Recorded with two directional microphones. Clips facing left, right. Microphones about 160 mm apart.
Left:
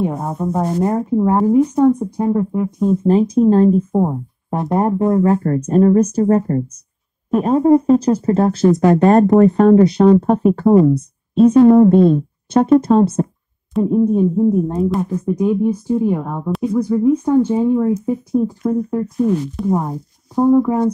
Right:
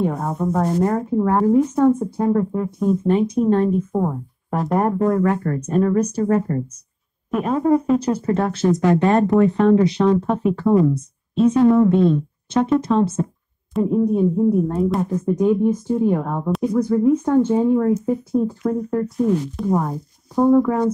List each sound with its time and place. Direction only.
0.0 s speech: 15° left (ahead or behind)
2.9 s speech: 30° left (ahead or behind)
3.9 s speech: 25° left (ahead or behind); by 6.2 s 45° left (ahead or behind)
6.2 s speech: 30° left (ahead or behind)
13.8 s speech: 20° left (ahead or behind)
14.8 s speech: centre (ahead or behind)